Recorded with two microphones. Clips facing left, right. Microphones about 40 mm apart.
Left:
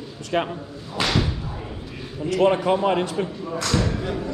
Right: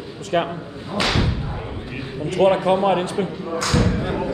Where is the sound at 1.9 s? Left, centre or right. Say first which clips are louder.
Left 1 dB; right.